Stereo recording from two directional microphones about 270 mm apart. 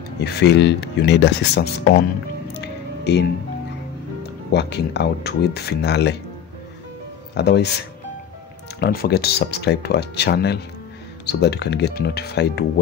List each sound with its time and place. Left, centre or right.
0.2 s speech: left
2.5 s music: left
4.5 s speech: left
7.3 s speech: left
8.7 s speech: left